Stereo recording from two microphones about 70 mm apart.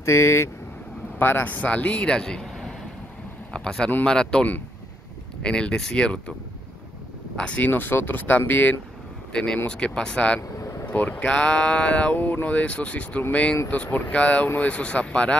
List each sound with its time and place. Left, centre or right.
0.0 s speech: left
1.2 s speech: left
7.3 s speech: centre
9.3 s speech: centre